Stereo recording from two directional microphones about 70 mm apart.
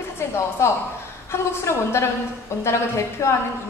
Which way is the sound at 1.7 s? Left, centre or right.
Left.